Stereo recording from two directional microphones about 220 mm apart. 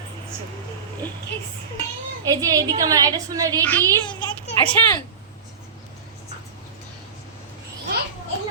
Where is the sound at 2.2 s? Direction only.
15° right (ahead or behind).